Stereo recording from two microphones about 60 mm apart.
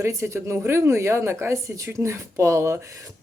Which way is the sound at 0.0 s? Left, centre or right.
Right.